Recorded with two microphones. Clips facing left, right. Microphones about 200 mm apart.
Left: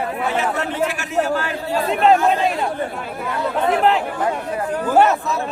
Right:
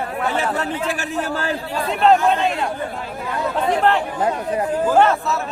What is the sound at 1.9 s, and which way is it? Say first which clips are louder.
Speech: even; 5° left (ahead or behind).